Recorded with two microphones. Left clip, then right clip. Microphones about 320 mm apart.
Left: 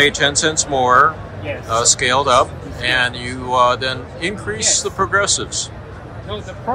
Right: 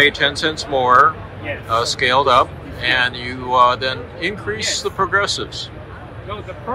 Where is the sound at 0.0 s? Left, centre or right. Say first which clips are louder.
Left 1 dB; centre.